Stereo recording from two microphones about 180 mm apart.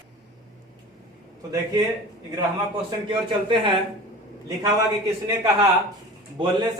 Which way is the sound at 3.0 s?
25° right (ahead or behind).